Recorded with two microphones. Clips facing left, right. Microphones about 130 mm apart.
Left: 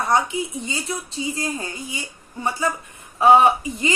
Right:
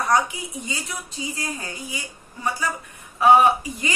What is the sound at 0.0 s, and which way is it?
Speech, 25° left (ahead or behind).